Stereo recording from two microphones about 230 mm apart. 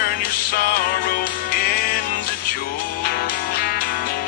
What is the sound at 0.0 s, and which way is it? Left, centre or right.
Music, left.